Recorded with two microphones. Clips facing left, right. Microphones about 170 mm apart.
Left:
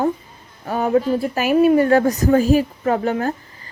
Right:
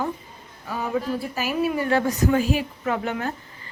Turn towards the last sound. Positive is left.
turn(degrees=40)  # may be behind; listen again after turning